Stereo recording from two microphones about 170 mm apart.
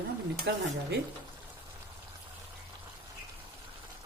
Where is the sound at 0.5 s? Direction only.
90° right.